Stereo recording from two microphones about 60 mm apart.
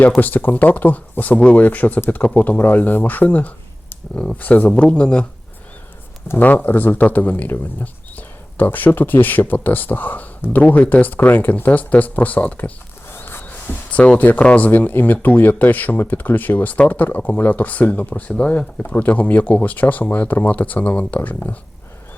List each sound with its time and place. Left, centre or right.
0.2 s speech: left
6.4 s speech: left
13.1 s a sound: left
14.2 s speech: left